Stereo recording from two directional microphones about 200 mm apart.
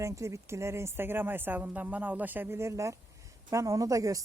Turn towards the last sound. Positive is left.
turn(degrees=-15)  # may be behind; listen again after turning